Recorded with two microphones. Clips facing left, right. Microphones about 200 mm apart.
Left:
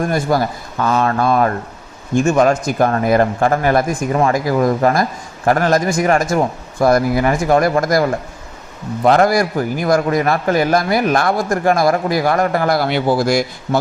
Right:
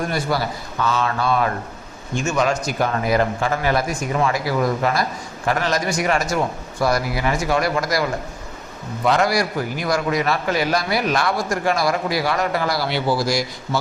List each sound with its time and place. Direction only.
0.1 s a man's voice: 45° left (ahead or behind)
9.0 s a man's voice: 50° left (ahead or behind)